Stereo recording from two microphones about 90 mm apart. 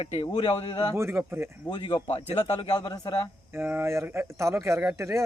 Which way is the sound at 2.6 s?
55° left (ahead or behind).